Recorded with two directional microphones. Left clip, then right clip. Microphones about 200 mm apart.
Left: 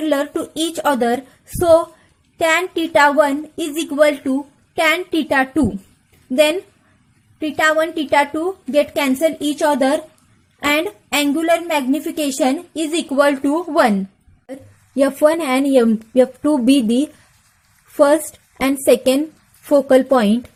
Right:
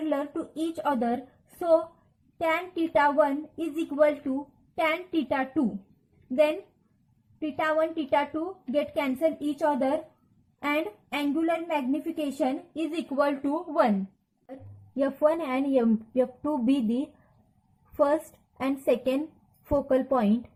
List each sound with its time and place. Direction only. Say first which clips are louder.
0.1 s a woman's voice: left 11 dB; 40° left (ahead or behind)
14.4 s a woman's voice: left 11 dB; 25° left (ahead or behind)